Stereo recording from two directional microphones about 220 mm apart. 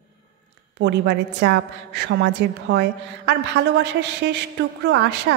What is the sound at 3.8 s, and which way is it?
A woman's voice, 50° right (ahead or behind).